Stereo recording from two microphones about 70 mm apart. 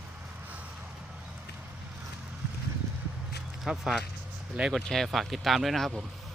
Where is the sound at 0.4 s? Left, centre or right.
Right.